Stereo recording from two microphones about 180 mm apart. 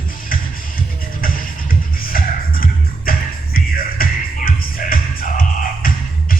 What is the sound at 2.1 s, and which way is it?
Music, 50° left (ahead or behind).